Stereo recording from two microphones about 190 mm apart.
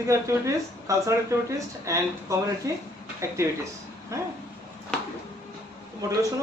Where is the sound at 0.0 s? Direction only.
15° right (ahead or behind).